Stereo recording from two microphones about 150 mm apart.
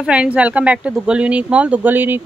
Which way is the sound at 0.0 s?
5° right (ahead or behind).